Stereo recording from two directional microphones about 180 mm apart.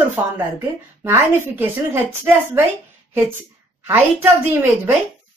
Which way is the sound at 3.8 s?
10° right (ahead or behind).